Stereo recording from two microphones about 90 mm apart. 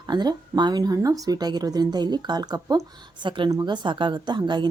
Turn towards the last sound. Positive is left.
turn(degrees=-60)  # may be behind; listen again after turning